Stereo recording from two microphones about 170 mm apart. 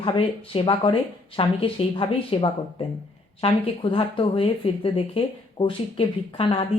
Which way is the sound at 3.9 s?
30° left (ahead or behind).